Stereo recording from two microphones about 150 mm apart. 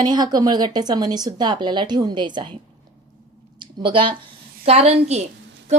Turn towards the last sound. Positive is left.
turn(degrees=-45)  # may be behind; listen again after turning